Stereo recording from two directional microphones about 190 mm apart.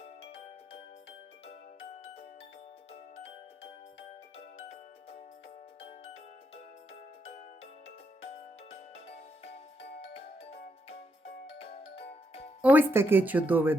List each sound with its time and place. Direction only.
9.1 s music: 35° left (ahead or behind)
12.6 s speech: 10° right (ahead or behind)